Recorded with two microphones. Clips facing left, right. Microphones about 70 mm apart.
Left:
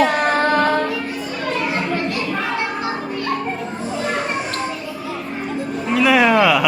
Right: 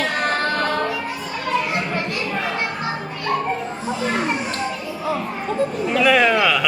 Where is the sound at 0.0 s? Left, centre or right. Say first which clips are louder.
Left 5 dB; centre.